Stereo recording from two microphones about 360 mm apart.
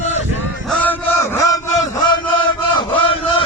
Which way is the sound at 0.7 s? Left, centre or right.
Centre.